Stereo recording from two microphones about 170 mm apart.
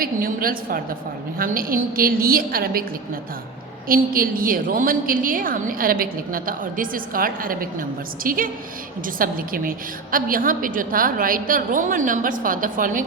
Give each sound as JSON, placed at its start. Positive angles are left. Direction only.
{"t": 0.0, "sound": "a woman's voice", "side_deg": -60}
{"t": 3.8, "sound": "a woman's voice", "side_deg": -55}